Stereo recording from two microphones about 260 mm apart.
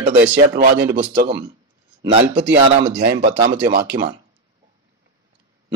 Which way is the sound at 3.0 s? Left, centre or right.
Right.